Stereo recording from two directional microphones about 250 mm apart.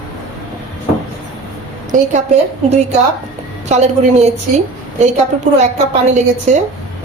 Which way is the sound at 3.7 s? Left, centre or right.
Right.